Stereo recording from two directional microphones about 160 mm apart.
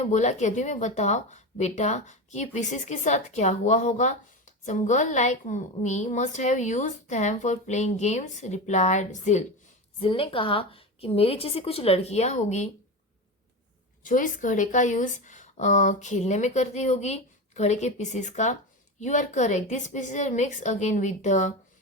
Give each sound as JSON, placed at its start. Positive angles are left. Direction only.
{"t": 0.0, "sound": "a woman's voice", "side_deg": 45}
{"t": 10.0, "sound": "a woman's voice", "side_deg": 35}
{"t": 14.0, "sound": "a woman's voice", "side_deg": 55}